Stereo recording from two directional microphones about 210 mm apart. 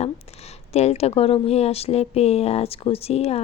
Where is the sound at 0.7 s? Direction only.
30° left (ahead or behind).